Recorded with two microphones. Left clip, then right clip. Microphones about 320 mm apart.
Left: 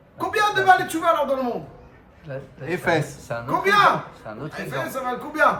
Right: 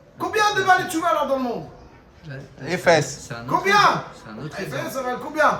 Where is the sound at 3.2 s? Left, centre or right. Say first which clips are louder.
Even; centre.